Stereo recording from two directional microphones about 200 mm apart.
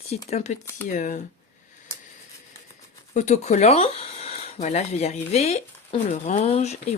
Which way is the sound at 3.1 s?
35° left (ahead or behind).